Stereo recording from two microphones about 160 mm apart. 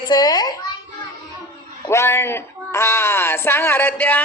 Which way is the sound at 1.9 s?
15° left (ahead or behind).